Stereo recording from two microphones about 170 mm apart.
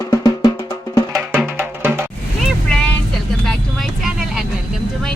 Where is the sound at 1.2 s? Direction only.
5° right (ahead or behind).